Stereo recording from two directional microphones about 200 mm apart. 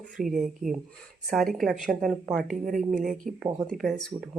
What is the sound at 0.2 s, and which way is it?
Speech, centre (ahead or behind).